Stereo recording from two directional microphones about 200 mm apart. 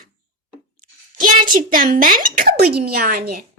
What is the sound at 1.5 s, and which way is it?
Speech, 45° right (ahead or behind).